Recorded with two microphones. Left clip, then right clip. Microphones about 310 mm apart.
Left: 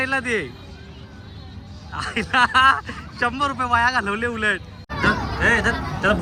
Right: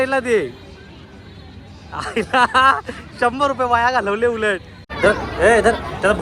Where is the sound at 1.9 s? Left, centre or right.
Centre.